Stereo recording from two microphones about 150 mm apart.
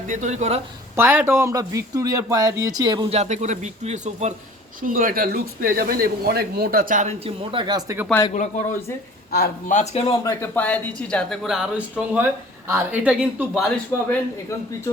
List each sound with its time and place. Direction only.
0.1 s speech: 50° right (ahead or behind)
0.9 s speech: 15° right (ahead or behind)
3.1 s speech: 50° right (ahead or behind)
4.8 s speech: 65° right (ahead or behind)
7.3 s speech: 30° right (ahead or behind)
8.3 s speech: 55° left (ahead or behind)
9.3 s speech: 85° left
9.7 s speech: 45° left (ahead or behind)
10.2 s speech: 15° left (ahead or behind); by 13.7 s 5° right (ahead or behind)